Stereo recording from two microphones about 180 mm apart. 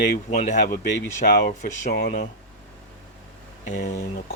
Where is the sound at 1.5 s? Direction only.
60° left (ahead or behind).